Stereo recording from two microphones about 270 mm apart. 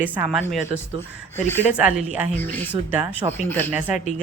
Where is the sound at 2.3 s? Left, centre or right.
Centre.